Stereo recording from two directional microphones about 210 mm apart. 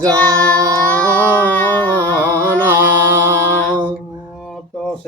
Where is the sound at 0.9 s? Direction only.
10° left (ahead or behind).